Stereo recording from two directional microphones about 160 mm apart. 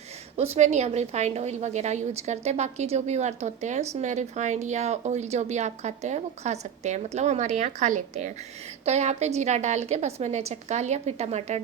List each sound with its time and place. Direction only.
0.5 s speech: 45° right (ahead or behind)